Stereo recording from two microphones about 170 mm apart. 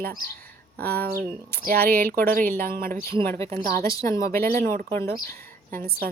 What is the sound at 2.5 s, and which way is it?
A woman's voice, 15° left (ahead or behind).